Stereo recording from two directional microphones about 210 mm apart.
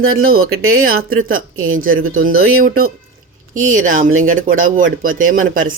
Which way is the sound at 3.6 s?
40° right (ahead or behind).